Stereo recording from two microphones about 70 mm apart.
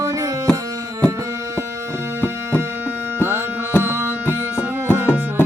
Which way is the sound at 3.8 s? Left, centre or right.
Right.